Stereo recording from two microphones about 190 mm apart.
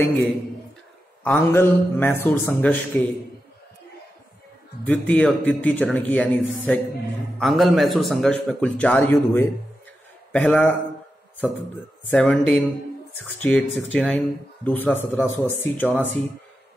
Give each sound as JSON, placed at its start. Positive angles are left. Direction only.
{"t": 1.2, "sound": "a man's voice", "side_deg": 10}
{"t": 4.8, "sound": "a man's voice", "side_deg": 5}
{"t": 12.1, "sound": "a man's voice", "side_deg": 5}